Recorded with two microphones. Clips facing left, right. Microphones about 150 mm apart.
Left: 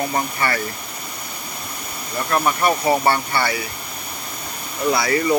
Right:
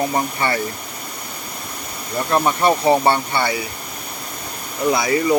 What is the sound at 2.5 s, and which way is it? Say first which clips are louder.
Speech: right 3 dB; 25° right (ahead or behind).